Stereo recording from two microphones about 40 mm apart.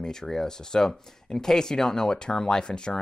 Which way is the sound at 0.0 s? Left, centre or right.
Centre.